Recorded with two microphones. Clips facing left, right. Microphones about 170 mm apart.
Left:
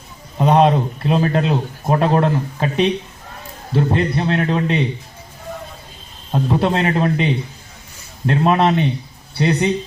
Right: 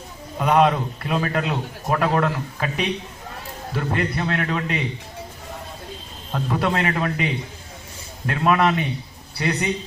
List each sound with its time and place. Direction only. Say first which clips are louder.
0.3 s a man's voice: left 4 dB; 25° left (ahead or behind)
6.3 s a man's voice: left 5 dB; 25° left (ahead or behind)
8.3 s a man's voice: left 4 dB; 25° left (ahead or behind)